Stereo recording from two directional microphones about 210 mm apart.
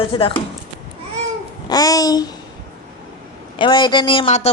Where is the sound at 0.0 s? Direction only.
25° left (ahead or behind).